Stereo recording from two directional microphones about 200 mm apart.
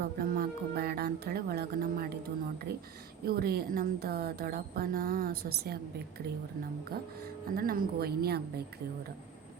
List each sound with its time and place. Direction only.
0.0 s a woman's voice: 50° right (ahead or behind)
7.5 s a woman's voice: 45° right (ahead or behind)